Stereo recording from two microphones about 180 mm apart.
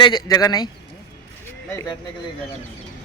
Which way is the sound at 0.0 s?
20° left (ahead or behind).